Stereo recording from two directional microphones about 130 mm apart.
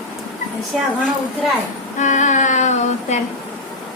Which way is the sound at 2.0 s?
70° left (ahead or behind).